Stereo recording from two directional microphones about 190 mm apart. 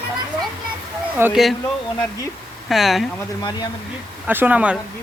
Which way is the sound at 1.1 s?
5° right (ahead or behind).